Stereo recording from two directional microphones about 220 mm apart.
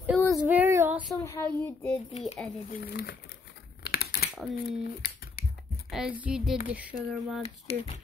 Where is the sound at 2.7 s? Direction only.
45° left (ahead or behind).